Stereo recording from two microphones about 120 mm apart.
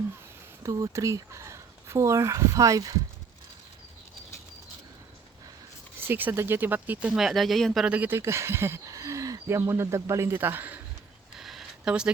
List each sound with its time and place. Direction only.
0.6 s speech: 30° right (ahead or behind)
6.1 s speech: 15° right (ahead or behind)
7.1 s speech: centre (ahead or behind)
7.9 s speech: 15° right (ahead or behind)
11.3 s a sound: centre (ahead or behind)